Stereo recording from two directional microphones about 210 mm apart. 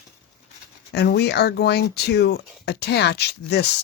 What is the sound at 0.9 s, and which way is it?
Speech, 55° left (ahead or behind).